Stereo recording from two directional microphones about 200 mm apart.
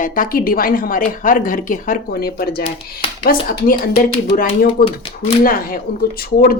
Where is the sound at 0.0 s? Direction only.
45° left (ahead or behind).